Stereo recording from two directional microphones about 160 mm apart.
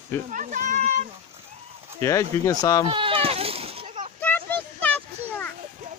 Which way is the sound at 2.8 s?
35° right (ahead or behind).